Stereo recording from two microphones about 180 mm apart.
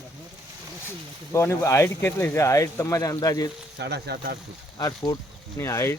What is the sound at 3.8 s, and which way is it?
Speech, 65° right (ahead or behind).